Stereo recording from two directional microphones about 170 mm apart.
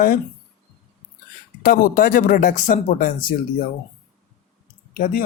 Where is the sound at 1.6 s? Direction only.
60° left (ahead or behind).